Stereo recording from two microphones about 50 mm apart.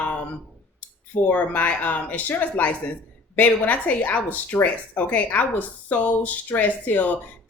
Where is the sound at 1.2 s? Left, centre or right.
Left.